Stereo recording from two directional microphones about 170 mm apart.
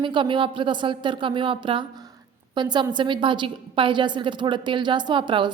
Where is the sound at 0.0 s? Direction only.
30° right (ahead or behind).